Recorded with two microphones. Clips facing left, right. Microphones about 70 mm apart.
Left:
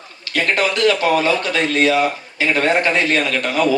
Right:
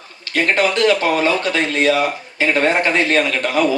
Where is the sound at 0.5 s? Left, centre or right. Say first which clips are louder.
Right 1 dB; right.